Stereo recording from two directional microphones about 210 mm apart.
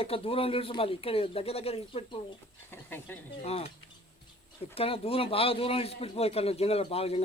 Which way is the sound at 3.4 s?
30° left (ahead or behind).